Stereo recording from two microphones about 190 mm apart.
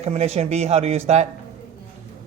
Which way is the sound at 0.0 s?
35° right (ahead or behind).